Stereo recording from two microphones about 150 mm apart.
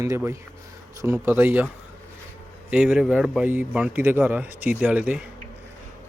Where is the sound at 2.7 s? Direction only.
5° right (ahead or behind).